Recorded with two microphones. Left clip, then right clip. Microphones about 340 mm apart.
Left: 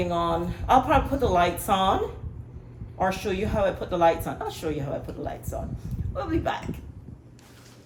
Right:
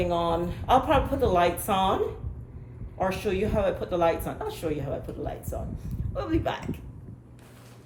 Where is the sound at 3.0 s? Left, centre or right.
Centre.